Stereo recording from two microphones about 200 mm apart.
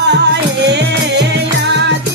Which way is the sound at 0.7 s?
60° right (ahead or behind).